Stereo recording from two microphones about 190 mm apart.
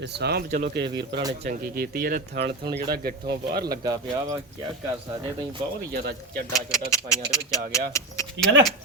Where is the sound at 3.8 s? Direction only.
20° right (ahead or behind).